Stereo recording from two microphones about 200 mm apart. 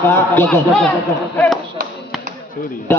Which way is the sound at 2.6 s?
45° left (ahead or behind).